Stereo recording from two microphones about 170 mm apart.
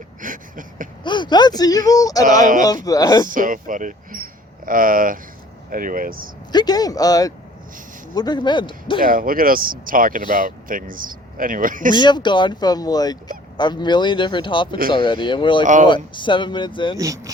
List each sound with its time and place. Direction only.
0.2 s a sound: 50° right (ahead or behind)
1.0 s speech: 25° left (ahead or behind)
2.2 s speech: 50° right (ahead or behind)
2.8 s speech: 20° left (ahead or behind)
3.2 s speech: 50° right (ahead or behind)
6.5 s speech: 25° left (ahead or behind)
9.0 s speech: 55° right (ahead or behind)
11.9 s speech: 25° left (ahead or behind)
15.6 s speech: 45° right (ahead or behind)
15.9 s speech: 30° left (ahead or behind)
17.0 s speech: 20° right (ahead or behind)